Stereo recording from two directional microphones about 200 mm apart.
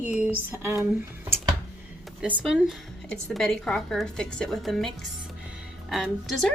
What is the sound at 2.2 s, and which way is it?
Speech, 5° right (ahead or behind).